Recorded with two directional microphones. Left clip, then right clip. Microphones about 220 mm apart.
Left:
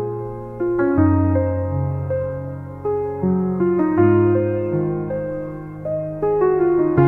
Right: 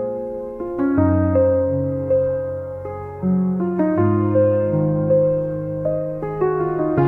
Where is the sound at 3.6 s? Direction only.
Centre (ahead or behind).